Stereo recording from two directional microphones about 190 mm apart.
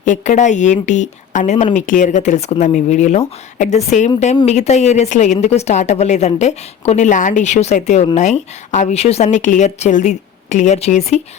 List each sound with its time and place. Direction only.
0.0 s a woman's voice: 40° left (ahead or behind)